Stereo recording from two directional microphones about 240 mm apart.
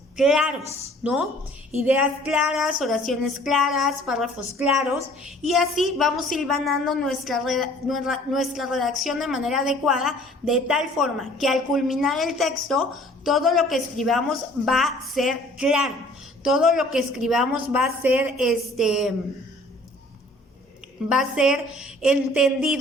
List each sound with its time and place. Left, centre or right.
0.2 s a woman's voice: centre
21.1 s a woman's voice: centre